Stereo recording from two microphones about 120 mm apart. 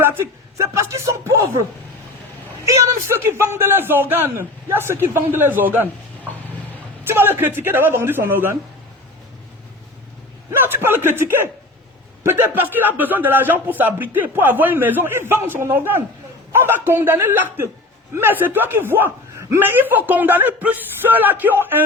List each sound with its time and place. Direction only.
0.0 s a man's voice: 20° right (ahead or behind)
2.6 s speech: 25° right (ahead or behind)
7.1 s speech: 20° right (ahead or behind)
10.6 s speech: 20° right (ahead or behind)